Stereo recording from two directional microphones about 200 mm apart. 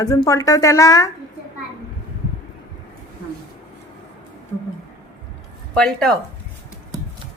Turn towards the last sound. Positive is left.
turn(degrees=5)  # may be behind; listen again after turning